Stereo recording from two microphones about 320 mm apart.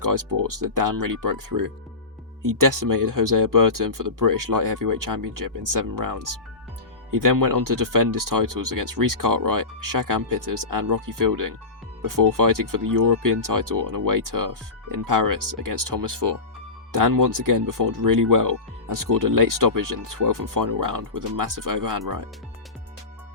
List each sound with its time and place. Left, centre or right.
0.0 s speech: right